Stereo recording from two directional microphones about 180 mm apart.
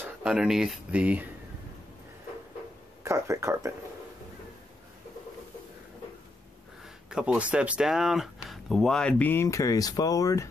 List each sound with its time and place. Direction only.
0.0 s speech: 5° right (ahead or behind)
3.0 s speech: 15° right (ahead or behind)
7.1 s speech: 5° right (ahead or behind); by 10.5 s 20° left (ahead or behind)